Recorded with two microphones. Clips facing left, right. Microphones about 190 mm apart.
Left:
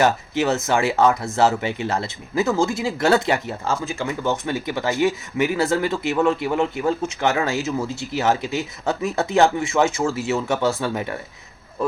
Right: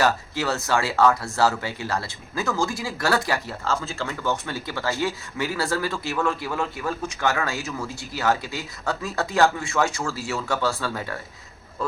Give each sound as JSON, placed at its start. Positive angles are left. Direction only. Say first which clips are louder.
{"t": 0.0, "sound": "speech", "louder": "left 4 dB", "side_deg": 20}